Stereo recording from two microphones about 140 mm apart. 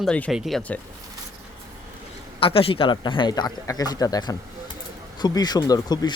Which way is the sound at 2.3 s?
40° left (ahead or behind).